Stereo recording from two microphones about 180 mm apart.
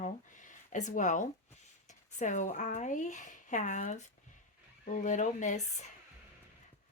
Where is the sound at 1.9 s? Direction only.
40° left (ahead or behind).